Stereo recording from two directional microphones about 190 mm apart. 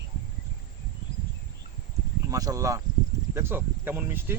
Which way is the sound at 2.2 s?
20° right (ahead or behind).